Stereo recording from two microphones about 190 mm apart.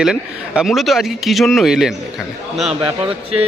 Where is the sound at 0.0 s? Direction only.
5° right (ahead or behind).